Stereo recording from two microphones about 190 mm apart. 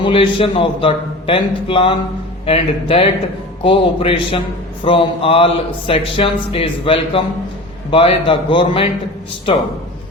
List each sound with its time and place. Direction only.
0.0 s speech: 30° left (ahead or behind)